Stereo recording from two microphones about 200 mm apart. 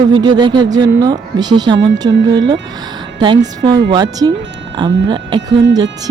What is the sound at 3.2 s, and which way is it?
Speech, 20° right (ahead or behind).